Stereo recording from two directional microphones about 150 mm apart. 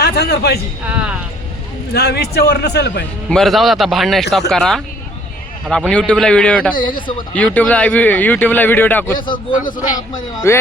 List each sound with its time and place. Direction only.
0.0 s a man's voice: 90° left
0.9 s speech: 10° right (ahead or behind)
1.9 s a man's voice: 90° left
3.2 s a man's voice: 5° left (ahead or behind)
6.7 s speech: 30° left (ahead or behind)
7.3 s speech: 10° left (ahead or behind)
10.2 s speech: 20° left (ahead or behind)